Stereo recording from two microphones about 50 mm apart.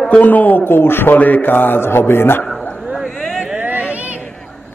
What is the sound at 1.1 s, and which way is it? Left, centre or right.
A man's voice, left.